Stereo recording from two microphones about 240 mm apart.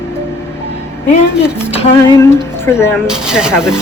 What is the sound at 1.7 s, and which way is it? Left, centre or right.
Music, left.